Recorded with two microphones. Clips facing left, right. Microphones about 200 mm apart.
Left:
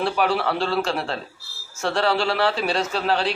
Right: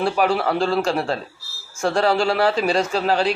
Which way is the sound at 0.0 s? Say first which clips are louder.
Right 2 dB; centre (ahead or behind).